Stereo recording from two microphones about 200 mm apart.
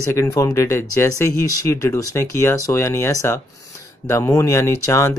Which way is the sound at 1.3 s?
90° right.